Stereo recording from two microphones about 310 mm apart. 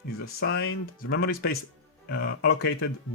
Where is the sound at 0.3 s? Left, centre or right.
Left.